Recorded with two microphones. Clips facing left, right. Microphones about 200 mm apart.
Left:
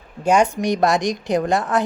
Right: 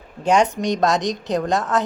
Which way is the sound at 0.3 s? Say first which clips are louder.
Left 1 dB; 5° left (ahead or behind).